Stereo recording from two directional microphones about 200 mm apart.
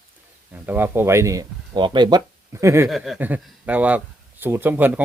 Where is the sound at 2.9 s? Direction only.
Centre (ahead or behind).